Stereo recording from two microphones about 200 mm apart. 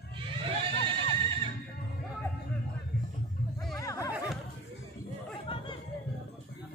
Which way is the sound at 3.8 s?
15° left (ahead or behind).